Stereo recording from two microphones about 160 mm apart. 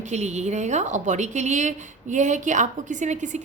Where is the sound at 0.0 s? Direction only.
45° right (ahead or behind).